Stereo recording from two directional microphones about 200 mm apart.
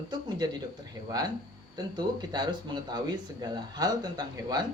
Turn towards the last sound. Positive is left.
turn(degrees=-20)  # may be behind; listen again after turning